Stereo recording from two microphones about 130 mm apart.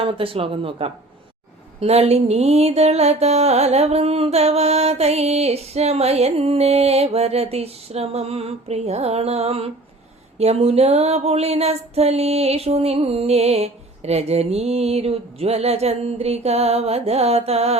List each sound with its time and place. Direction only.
0.0 s music: 45° right (ahead or behind)